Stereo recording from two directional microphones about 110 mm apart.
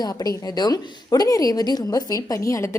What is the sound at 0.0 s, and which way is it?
A woman's voice, 35° left (ahead or behind).